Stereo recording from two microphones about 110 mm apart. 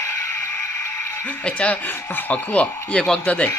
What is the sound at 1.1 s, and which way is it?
Speech, 15° left (ahead or behind).